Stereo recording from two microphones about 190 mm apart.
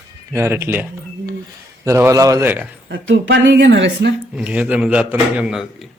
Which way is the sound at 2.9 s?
80° right.